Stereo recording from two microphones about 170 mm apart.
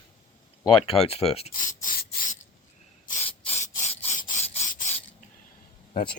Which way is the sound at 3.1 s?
40° left (ahead or behind).